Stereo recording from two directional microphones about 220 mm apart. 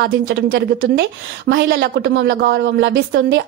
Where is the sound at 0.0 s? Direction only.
45° right (ahead or behind).